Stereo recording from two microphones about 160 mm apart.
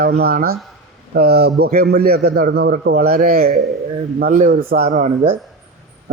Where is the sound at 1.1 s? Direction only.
80° right.